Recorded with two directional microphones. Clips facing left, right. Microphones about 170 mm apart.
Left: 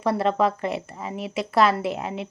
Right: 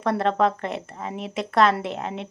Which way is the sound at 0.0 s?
5° left (ahead or behind).